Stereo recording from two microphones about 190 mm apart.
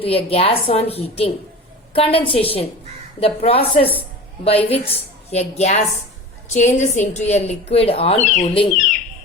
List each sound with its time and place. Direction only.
0.0 s a woman's voice: 30° left (ahead or behind)